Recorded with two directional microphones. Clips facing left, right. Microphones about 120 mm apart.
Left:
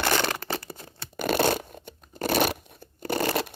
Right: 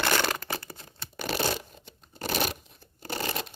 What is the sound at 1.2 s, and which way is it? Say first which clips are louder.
Tearing: left 6 dB; 55° left (ahead or behind).